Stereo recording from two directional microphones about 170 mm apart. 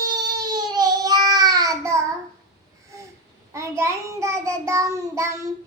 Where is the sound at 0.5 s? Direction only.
25° right (ahead or behind).